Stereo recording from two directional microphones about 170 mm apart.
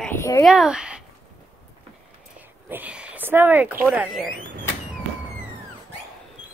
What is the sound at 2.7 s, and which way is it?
Speech, 10° right (ahead or behind).